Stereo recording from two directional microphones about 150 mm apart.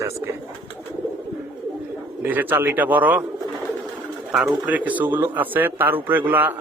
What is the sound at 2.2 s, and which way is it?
Speech, 10° right (ahead or behind).